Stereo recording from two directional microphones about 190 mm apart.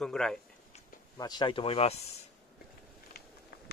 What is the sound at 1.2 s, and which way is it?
Speech, 20° left (ahead or behind).